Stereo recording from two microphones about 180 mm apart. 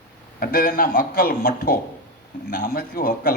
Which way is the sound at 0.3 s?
55° left (ahead or behind).